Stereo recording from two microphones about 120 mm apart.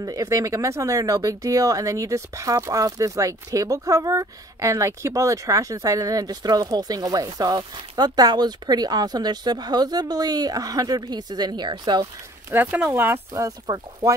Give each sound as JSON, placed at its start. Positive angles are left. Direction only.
{"t": 0.0, "sound": "speech", "side_deg": -25}
{"t": 12.4, "sound": "speech", "side_deg": -20}
{"t": 13.3, "sound": "speech", "side_deg": -30}